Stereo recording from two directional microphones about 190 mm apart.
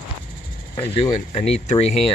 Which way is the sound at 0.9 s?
30° left (ahead or behind).